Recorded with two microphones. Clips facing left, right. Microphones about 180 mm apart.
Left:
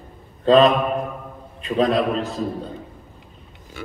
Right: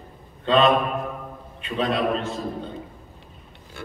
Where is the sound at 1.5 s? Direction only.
40° left (ahead or behind).